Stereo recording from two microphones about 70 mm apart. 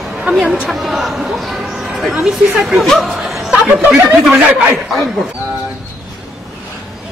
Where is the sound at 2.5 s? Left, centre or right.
Centre.